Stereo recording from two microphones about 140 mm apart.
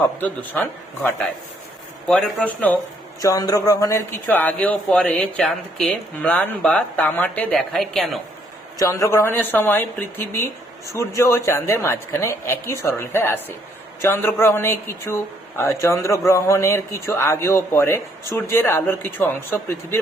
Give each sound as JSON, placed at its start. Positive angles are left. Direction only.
{"t": 0.0, "sound": "speech", "side_deg": 10}
{"t": 3.2, "sound": "speech", "side_deg": 25}
{"t": 8.8, "sound": "a woman's voice", "side_deg": 20}